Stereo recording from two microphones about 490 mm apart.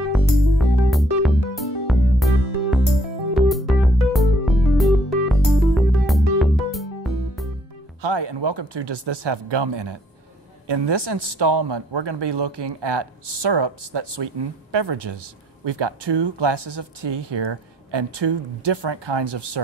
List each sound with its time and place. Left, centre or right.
0.1 s music: centre
8.0 s speech: right